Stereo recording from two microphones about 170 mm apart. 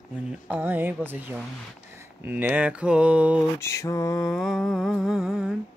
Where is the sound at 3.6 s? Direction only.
15° left (ahead or behind).